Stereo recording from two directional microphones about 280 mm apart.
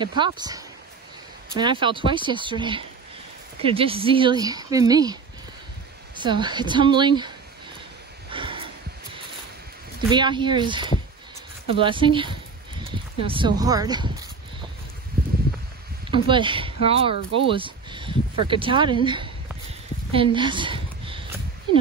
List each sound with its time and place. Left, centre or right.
0.0 s speech: centre
8.3 s snort: centre
10.0 s speech: centre
15.2 s a sound: right
16.1 s speech: centre
20.1 s a sound: centre